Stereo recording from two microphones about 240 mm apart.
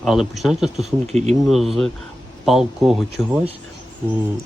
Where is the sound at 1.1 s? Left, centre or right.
Right.